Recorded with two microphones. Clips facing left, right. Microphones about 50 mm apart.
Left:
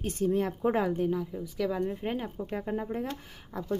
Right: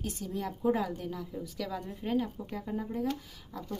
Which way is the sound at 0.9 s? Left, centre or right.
Left.